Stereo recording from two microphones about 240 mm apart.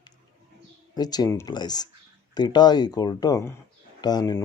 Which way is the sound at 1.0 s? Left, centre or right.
Centre.